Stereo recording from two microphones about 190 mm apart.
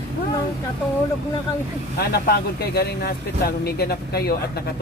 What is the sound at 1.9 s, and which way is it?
Speech, 55° left (ahead or behind).